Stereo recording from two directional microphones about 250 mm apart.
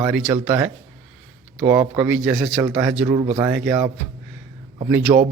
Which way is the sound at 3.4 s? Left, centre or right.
Centre.